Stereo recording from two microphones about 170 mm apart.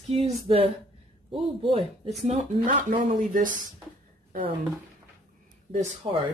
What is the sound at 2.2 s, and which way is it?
Speech, 45° right (ahead or behind).